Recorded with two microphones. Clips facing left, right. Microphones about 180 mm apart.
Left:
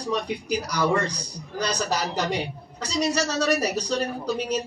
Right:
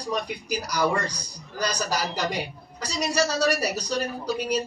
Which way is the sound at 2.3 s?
10° right (ahead or behind).